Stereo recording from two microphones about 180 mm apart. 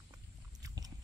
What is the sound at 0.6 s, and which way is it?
Biting, 20° right (ahead or behind).